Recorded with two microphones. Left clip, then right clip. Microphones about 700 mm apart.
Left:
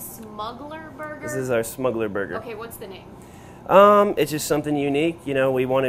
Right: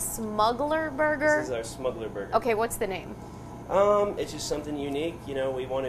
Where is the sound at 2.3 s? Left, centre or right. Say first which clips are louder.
Right 7 dB; right.